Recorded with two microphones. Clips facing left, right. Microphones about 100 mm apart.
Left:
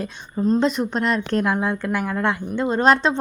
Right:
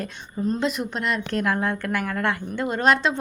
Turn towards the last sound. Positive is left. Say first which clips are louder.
# left 3 dB
turn(degrees=30)  # may be behind; listen again after turning